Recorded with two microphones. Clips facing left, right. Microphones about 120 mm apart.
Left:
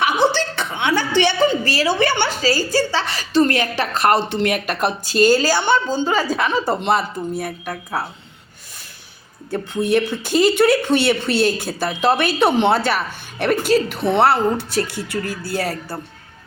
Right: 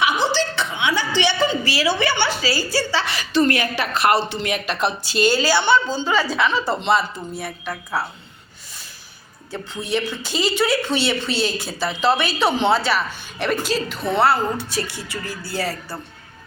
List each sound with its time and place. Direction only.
0.0 s a sound: 55° left (ahead or behind)
2.4 s a woman's voice: 40° left (ahead or behind)
9.5 s a woman's voice: 55° left (ahead or behind)